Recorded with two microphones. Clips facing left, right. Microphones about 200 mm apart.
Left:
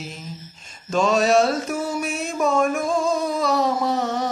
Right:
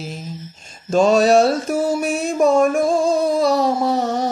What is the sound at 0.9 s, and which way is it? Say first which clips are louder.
Mantra: right 5 dB; 35° right (ahead or behind).